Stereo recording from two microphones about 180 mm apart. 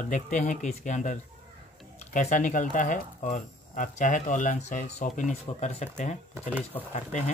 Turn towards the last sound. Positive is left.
turn(degrees=40)  # may be behind; listen again after turning